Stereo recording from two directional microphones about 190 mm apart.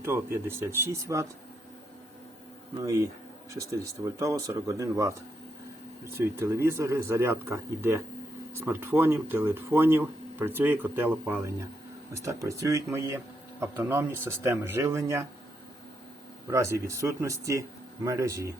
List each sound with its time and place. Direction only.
0.0 s speech: 10° right (ahead or behind)
2.8 s speech: 15° right (ahead or behind)
16.5 s speech: 15° right (ahead or behind)